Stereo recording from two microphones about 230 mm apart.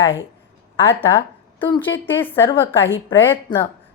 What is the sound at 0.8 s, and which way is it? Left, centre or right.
A woman's voice, centre.